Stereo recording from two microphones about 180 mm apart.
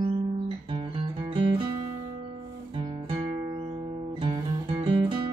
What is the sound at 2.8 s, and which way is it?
Music, 30° right (ahead or behind).